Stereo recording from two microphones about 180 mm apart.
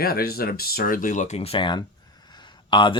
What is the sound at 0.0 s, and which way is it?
Speech, 55° left (ahead or behind).